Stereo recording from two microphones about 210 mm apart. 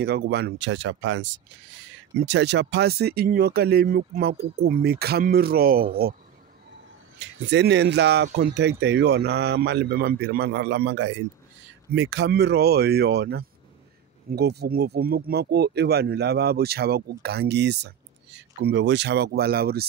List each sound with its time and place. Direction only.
0.0 s speech: 50° right (ahead or behind)
7.2 s speech: 55° right (ahead or behind)